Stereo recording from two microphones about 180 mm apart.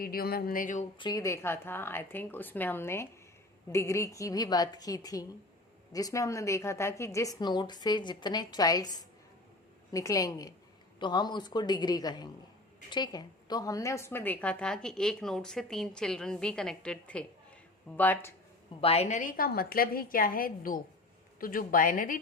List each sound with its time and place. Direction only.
0.0 s a woman's voice: 55° left (ahead or behind)
0.9 s a woman's voice: 25° left (ahead or behind)
9.9 s a woman's voice: 20° left (ahead or behind)
18.8 s a woman's voice: 35° left (ahead or behind)